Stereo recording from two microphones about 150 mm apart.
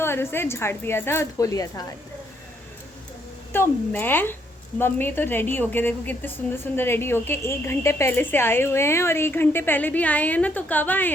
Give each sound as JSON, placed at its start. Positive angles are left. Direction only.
{"t": 0.0, "sound": "a woman's voice", "side_deg": 15}
{"t": 3.5, "sound": "a woman's voice", "side_deg": 15}